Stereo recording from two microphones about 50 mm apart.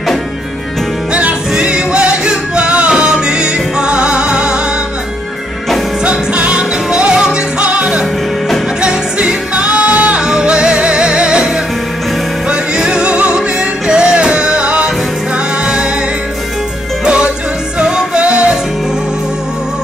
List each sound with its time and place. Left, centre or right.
1.5 s music: centre
6.0 s music: right
17.0 s music: right